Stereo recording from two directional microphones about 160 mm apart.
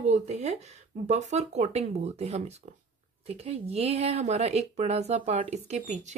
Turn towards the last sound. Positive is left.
turn(degrees=-45)  # may be behind; listen again after turning